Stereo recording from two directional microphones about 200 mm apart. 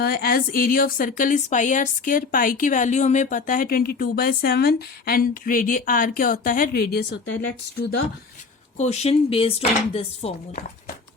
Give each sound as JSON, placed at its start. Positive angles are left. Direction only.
{"t": 0.0, "sound": "speech", "side_deg": 50}
{"t": 8.8, "sound": "chopping", "side_deg": 35}